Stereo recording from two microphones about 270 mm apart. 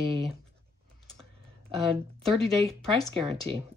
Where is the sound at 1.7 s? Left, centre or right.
Centre.